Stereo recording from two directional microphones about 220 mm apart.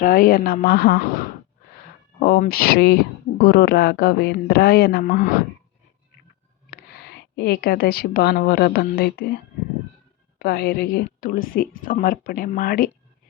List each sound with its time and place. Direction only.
0.0 s speech: 40° left (ahead or behind)
2.1 s speech: 40° left (ahead or behind)
6.7 s speech: 45° left (ahead or behind)